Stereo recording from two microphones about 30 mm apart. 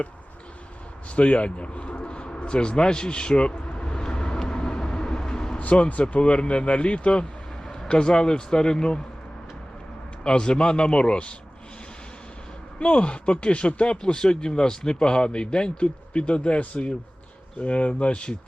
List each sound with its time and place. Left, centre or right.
1.1 s speech: left
4.0 s vehicle: left
6.0 s speech: left
7.7 s speech: left
10.2 s speech: left
12.8 s speech: left